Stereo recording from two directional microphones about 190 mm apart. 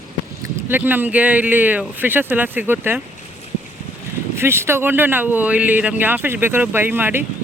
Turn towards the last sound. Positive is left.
turn(degrees=-10)  # may be behind; listen again after turning